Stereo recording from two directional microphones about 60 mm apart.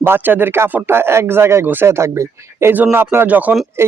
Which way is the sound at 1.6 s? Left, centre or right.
Right.